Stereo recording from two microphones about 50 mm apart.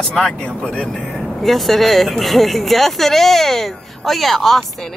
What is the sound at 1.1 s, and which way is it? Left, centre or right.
A woman's voice, centre.